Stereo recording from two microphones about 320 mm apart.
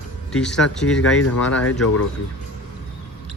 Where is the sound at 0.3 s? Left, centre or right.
Centre.